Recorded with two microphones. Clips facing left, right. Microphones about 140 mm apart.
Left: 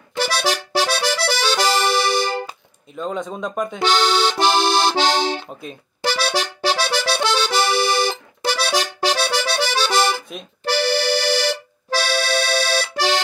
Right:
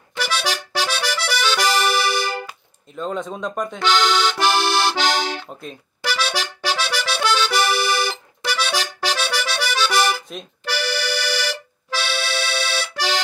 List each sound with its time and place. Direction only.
0.2 s accordion: 35° left (ahead or behind)
3.0 s speech: centre (ahead or behind)
3.8 s speech: 35° left (ahead or behind)
5.5 s speech: 5° left (ahead or behind)
6.0 s accordion: 35° left (ahead or behind)
8.1 s accordion: 35° left (ahead or behind)